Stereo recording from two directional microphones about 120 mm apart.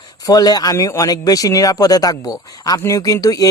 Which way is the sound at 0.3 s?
35° left (ahead or behind).